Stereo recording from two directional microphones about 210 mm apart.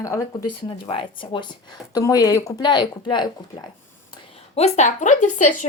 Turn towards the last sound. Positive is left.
turn(degrees=35)  # may be behind; listen again after turning